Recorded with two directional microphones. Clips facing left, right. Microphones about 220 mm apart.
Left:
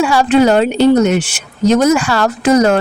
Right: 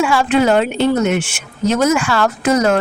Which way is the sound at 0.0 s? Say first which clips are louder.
Left 4 dB; 35° left (ahead or behind).